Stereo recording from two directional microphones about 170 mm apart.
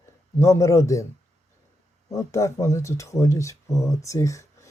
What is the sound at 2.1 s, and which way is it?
Speech, 20° left (ahead or behind).